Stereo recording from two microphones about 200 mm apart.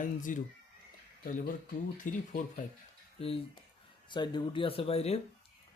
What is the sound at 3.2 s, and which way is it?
Speech, 30° left (ahead or behind).